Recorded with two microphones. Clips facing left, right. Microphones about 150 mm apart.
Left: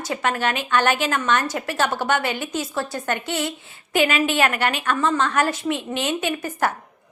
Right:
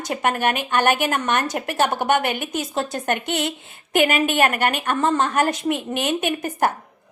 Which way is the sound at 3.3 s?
60° right (ahead or behind).